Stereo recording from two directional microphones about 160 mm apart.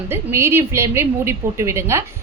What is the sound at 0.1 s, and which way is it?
A woman's voice, 15° right (ahead or behind).